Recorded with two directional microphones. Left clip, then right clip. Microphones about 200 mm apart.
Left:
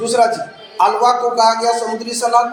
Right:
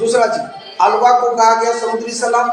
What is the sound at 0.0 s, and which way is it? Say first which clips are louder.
A man's voice: right 1 dB; 40° left (ahead or behind).